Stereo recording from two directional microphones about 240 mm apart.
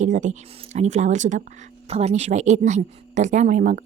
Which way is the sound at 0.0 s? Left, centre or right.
Right.